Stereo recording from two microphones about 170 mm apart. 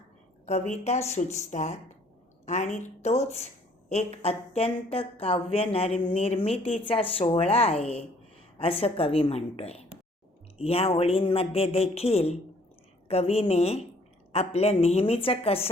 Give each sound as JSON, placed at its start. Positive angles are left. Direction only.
{"t": 0.4, "sound": "a woman's voice", "side_deg": 40}